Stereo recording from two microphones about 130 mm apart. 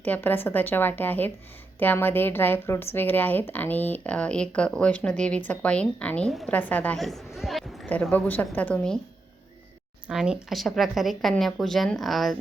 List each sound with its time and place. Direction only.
0.0 s a woman's voice: 15° left (ahead or behind)
7.0 s a sound: centre (ahead or behind)
7.9 s a woman's voice: 10° left (ahead or behind)
10.1 s speech: 5° right (ahead or behind)